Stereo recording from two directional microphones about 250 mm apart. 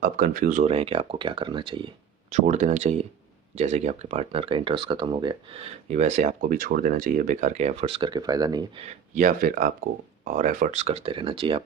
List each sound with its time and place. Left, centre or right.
0.0 s speech: right